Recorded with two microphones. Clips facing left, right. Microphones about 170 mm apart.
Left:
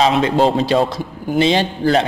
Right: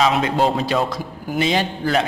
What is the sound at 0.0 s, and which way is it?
A man's voice, 30° left (ahead or behind).